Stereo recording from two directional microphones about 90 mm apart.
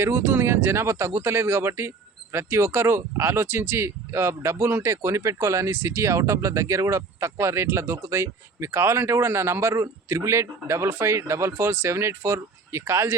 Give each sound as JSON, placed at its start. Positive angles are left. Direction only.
{"t": 0.0, "sound": "speech", "side_deg": -25}